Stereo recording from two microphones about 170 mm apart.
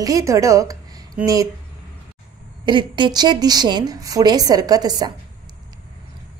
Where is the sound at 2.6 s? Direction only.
30° right (ahead or behind).